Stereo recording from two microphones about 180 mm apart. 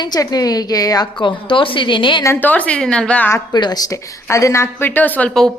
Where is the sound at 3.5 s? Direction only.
25° left (ahead or behind); by 5.5 s 5° left (ahead or behind).